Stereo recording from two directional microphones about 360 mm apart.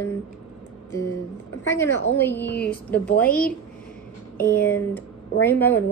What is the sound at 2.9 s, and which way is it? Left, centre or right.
Speech, centre.